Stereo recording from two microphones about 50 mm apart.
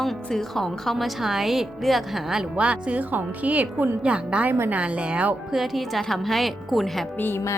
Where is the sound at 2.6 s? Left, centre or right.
Right.